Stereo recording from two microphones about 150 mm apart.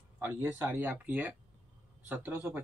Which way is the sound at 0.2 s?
10° right (ahead or behind).